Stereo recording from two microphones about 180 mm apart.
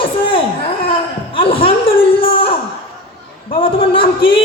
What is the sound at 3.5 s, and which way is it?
Speech, 30° left (ahead or behind).